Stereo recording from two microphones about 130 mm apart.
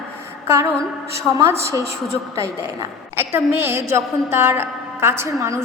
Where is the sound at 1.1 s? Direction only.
20° right (ahead or behind).